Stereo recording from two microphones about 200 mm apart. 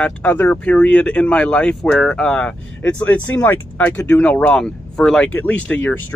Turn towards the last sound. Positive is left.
turn(degrees=10)  # may be behind; listen again after turning